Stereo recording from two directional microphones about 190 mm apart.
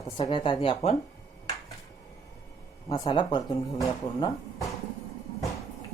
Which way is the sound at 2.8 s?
20° left (ahead or behind).